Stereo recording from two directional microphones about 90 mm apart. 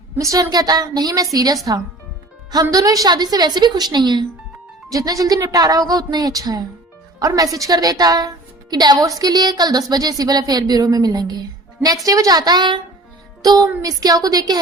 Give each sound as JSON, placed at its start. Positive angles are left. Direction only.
{"t": 0.2, "sound": "a woman's voice", "side_deg": -40}
{"t": 4.9, "sound": "a woman's voice", "side_deg": -40}
{"t": 13.4, "sound": "a woman's voice", "side_deg": -45}